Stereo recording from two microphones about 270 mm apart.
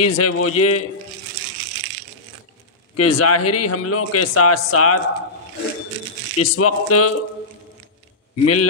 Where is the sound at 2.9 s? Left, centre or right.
Left.